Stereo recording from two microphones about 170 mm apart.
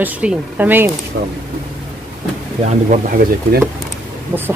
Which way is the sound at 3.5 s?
65° right (ahead or behind).